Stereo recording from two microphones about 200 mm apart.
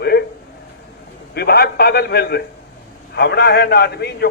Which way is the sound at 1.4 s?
50° left (ahead or behind).